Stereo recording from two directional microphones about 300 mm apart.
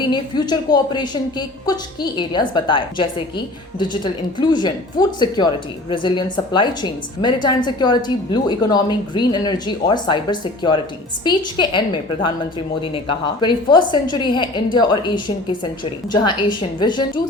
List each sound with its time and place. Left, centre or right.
0.0 s speech: centre